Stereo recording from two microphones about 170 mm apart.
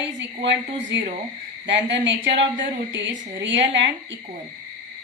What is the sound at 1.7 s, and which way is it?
Speech, 90° right.